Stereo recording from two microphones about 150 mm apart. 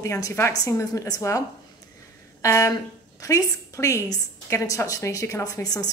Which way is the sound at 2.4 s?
20° left (ahead or behind).